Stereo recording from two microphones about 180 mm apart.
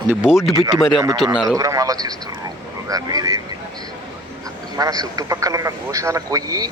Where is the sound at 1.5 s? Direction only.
20° right (ahead or behind).